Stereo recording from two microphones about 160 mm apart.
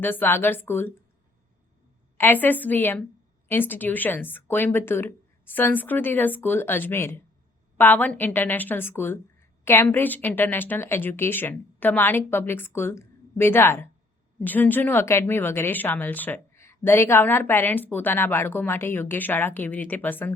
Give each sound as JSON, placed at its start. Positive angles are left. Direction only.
{"t": 0.0, "sound": "a woman's voice", "side_deg": 10}
{"t": 2.1, "sound": "a woman's voice", "side_deg": 10}